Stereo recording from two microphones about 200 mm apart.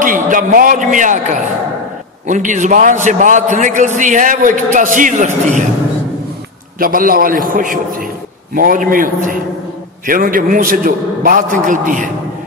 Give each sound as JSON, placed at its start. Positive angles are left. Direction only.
{"t": 0.0, "sound": "a man's voice", "side_deg": -40}
{"t": 6.8, "sound": "a man's voice", "side_deg": -45}